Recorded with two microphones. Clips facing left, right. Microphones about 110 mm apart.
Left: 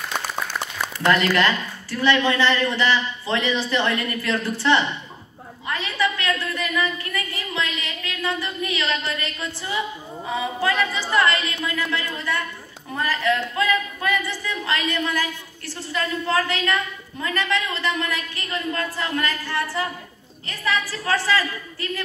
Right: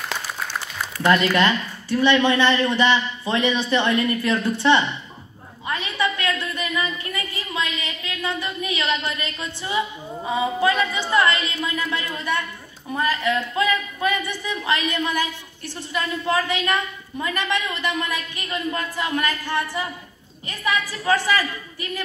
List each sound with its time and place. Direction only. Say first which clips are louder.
1.0 s speech: right 1 dB; 20° right (ahead or behind)
5.7 s a sound: even; 20° right (ahead or behind)
10.2 s a woman's voice: right 3 dB; 20° right (ahead or behind)